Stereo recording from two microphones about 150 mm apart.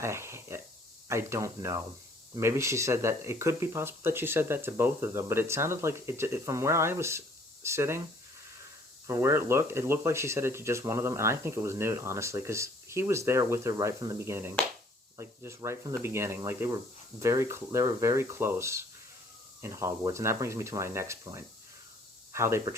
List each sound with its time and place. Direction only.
0.0 s speech: 15° right (ahead or behind)
9.0 s speech: 20° right (ahead or behind)